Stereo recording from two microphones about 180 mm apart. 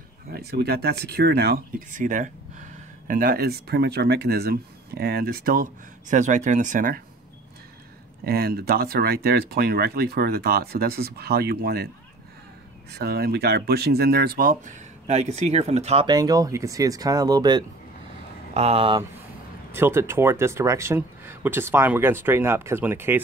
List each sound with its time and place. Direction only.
0.3 s speech: 60° right (ahead or behind)
1.9 s speech: 45° right (ahead or behind)
8.2 s speech: 60° right (ahead or behind)
12.9 s speech: 60° right (ahead or behind)
15.0 s speech: 35° right (ahead or behind)
16.1 s speech: 20° right (ahead or behind)
18.5 s speech: 35° right (ahead or behind)
19.7 s speech: 15° right (ahead or behind)